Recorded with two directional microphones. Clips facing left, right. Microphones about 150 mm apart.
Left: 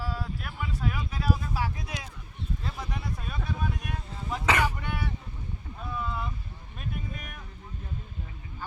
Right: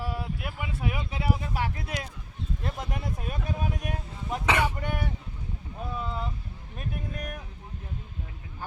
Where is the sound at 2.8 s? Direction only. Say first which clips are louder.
Right 2 dB; 50° right (ahead or behind).